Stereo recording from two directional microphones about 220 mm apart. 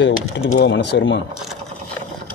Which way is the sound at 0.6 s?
55° left (ahead or behind).